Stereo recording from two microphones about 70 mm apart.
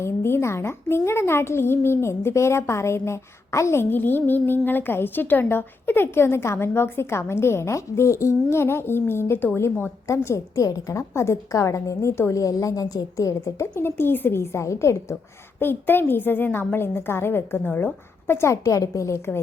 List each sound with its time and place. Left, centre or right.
0.0 s a woman's voice: left
15.1 s speech: left